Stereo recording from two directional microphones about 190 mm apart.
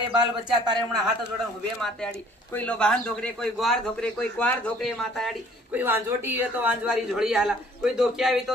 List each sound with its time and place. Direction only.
0.1 s a man's voice: 25° right (ahead or behind)
1.8 s speech: 5° left (ahead or behind)
5.8 s speech: 10° right (ahead or behind)